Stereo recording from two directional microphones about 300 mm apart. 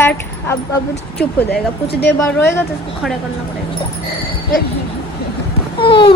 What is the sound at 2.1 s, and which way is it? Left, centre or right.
Speech, centre.